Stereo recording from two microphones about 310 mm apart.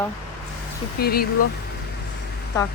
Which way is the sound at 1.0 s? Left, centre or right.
Left.